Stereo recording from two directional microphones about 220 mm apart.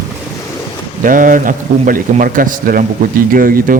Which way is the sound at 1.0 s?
40° right (ahead or behind).